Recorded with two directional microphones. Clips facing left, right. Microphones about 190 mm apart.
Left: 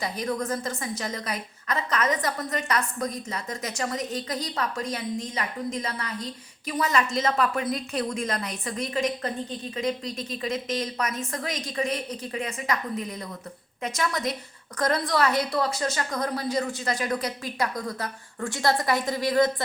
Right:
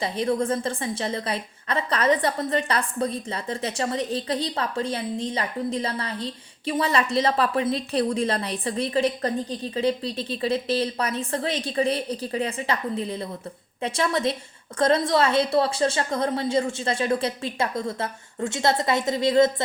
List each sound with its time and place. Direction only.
0.0 s a woman's voice: 30° right (ahead or behind)